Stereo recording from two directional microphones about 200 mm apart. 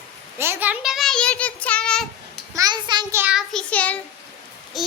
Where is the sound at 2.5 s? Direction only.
20° right (ahead or behind).